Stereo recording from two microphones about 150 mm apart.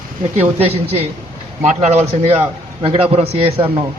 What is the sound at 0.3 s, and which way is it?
A man's voice, 40° right (ahead or behind).